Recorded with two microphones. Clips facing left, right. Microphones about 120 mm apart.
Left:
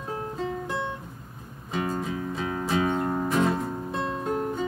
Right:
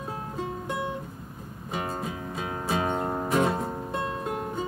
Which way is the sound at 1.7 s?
15° right (ahead or behind).